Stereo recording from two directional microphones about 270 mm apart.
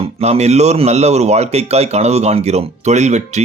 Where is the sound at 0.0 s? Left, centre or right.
Right.